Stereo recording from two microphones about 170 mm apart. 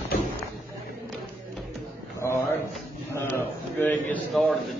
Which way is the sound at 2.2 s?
15° left (ahead or behind).